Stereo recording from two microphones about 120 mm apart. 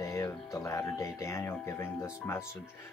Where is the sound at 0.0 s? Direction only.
25° left (ahead or behind).